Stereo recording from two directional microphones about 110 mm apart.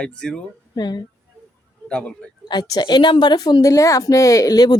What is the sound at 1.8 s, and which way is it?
Speech, 10° left (ahead or behind).